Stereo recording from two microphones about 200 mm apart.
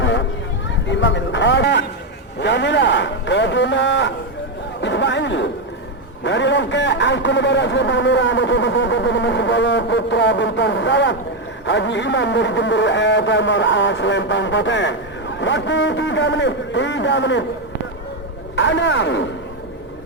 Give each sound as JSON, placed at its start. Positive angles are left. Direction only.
{"t": 0.0, "sound": "a sound", "side_deg": 65}
{"t": 0.9, "sound": "speech", "side_deg": 65}
{"t": 18.5, "sound": "speech", "side_deg": 65}